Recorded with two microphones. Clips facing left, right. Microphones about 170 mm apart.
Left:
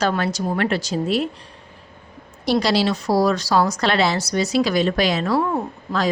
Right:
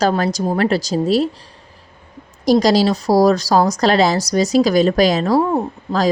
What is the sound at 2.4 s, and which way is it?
A woman's voice, 40° right (ahead or behind).